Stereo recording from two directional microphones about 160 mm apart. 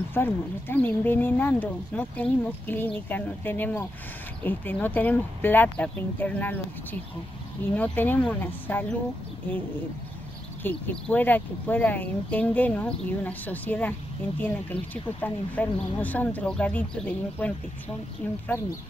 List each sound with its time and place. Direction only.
0.1 s speech: 15° left (ahead or behind)
10.6 s speech: 10° left (ahead or behind)